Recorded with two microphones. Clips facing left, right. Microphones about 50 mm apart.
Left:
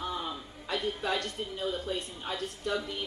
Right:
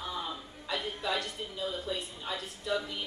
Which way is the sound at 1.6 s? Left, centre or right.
Left.